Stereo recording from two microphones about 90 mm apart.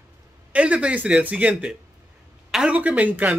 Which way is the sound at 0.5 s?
15° right (ahead or behind).